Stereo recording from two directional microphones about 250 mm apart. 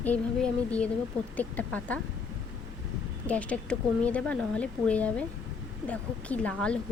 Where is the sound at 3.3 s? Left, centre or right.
Centre.